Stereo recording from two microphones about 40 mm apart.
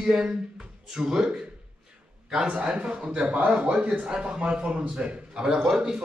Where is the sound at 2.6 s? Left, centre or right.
Right.